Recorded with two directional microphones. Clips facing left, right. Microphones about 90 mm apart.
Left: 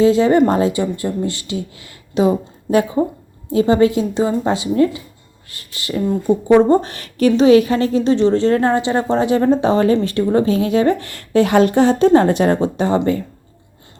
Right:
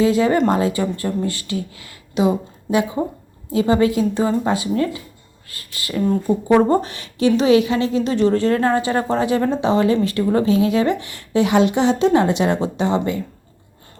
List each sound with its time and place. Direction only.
0.0 s speech: 30° left (ahead or behind)
6.8 s speech: 45° left (ahead or behind)
11.0 s speech: 55° left (ahead or behind); by 13.1 s 40° left (ahead or behind)